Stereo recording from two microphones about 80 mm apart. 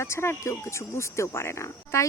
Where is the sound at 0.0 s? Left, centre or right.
Left.